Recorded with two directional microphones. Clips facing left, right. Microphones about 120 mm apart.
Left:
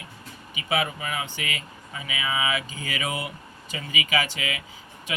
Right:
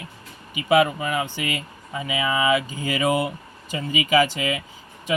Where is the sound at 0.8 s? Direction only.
45° right (ahead or behind).